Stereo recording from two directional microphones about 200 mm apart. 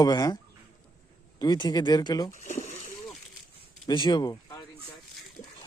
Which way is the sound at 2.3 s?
35° left (ahead or behind).